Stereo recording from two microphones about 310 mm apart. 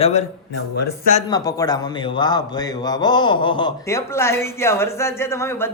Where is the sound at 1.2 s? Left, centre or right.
Centre.